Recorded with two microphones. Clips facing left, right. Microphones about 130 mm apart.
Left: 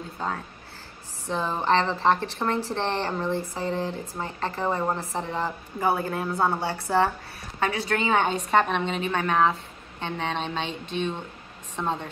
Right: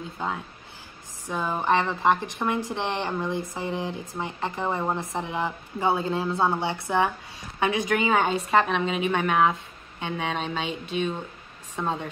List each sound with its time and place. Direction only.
0.2 s a woman's voice: 15° right (ahead or behind)